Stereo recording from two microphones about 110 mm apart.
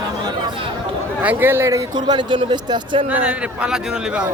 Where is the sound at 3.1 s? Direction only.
10° right (ahead or behind).